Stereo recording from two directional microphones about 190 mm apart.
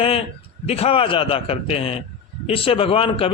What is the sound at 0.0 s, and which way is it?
A man's voice, 30° left (ahead or behind).